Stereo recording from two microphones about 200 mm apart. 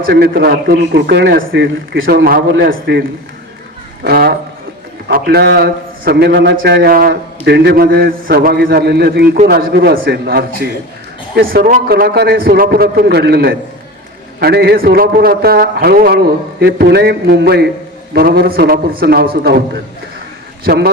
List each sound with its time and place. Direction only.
0.0 s a man's voice: 50° right (ahead or behind)
4.0 s a man's voice: 50° right (ahead or behind)
20.7 s a man's voice: 50° right (ahead or behind)